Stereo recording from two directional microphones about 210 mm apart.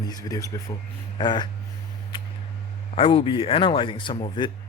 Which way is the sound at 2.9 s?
25° left (ahead or behind).